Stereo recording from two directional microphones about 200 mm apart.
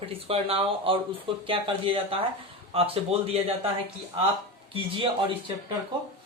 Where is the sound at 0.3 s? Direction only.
30° right (ahead or behind).